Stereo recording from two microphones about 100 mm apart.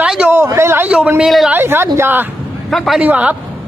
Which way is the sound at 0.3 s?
25° right (ahead or behind).